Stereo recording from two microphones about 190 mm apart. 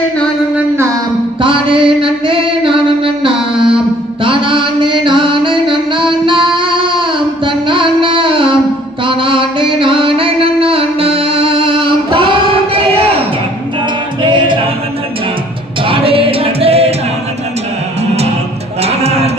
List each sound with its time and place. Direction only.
1.4 s music: 25° right (ahead or behind)
14.2 s music: 25° right (ahead or behind)
15.9 s music: 30° right (ahead or behind)
18.8 s livestock: 35° right (ahead or behind)